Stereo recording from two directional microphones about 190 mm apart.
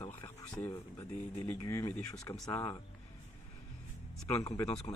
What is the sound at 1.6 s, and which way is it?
Speech, 20° left (ahead or behind).